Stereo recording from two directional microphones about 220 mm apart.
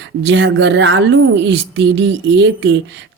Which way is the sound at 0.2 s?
55° right (ahead or behind).